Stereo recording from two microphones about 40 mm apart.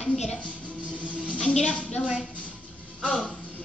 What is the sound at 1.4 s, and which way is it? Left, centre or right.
Speech, centre.